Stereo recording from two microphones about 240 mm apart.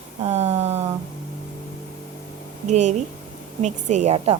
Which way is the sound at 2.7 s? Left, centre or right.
Right.